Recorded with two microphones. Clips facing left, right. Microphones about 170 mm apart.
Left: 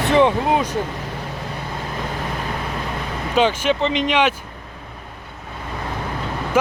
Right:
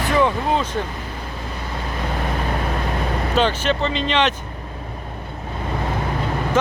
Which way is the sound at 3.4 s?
10° left (ahead or behind).